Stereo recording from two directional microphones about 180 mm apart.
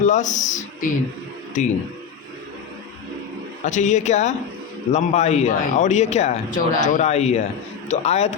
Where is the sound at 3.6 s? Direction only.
40° left (ahead or behind).